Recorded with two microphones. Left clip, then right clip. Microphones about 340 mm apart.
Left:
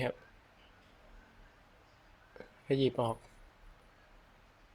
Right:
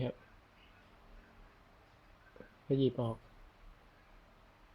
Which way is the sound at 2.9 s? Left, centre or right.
Left.